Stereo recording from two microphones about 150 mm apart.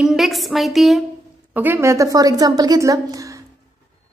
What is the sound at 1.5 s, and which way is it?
A woman's voice, 15° right (ahead or behind).